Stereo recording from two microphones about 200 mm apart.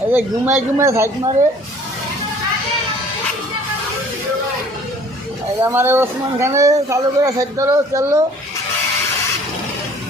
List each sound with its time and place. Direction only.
0.1 s speech: 10° right (ahead or behind)
5.6 s speech: 10° right (ahead or behind)